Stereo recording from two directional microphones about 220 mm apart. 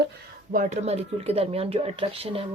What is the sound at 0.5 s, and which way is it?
Speech, 35° right (ahead or behind).